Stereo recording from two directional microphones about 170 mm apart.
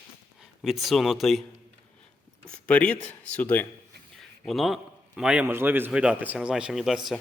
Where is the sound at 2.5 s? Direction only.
5° left (ahead or behind).